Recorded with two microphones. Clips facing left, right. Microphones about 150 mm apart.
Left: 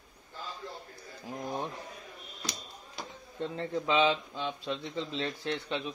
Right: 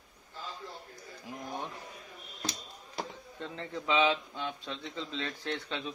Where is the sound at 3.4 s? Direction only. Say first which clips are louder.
Left 6 dB; 30° left (ahead or behind).